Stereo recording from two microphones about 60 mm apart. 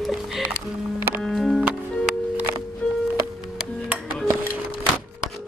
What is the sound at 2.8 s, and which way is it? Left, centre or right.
Music, left.